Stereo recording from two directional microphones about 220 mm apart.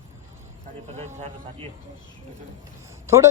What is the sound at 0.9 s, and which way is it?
Speech, 30° right (ahead or behind).